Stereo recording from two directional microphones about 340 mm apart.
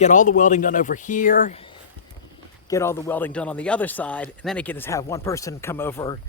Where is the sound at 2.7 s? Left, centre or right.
Centre.